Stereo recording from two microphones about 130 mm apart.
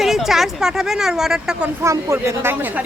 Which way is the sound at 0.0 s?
Centre (ahead or behind).